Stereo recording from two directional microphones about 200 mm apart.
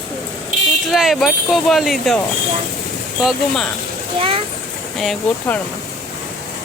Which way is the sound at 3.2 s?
Centre (ahead or behind).